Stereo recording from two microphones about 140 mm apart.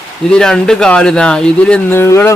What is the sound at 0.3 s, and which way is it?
Speech, 5° left (ahead or behind).